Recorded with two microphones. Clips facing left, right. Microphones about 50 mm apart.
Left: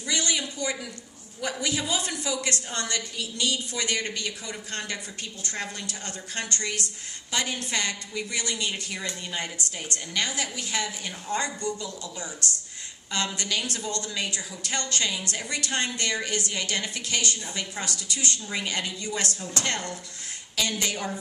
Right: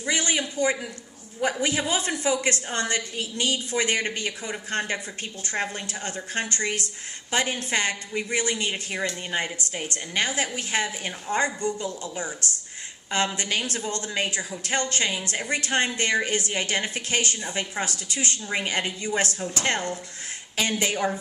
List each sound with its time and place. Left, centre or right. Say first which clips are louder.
0.0 s a man's voice: right 3 dB; right
12.4 s speech: even; left
13.1 s a woman's voice: right 4 dB; right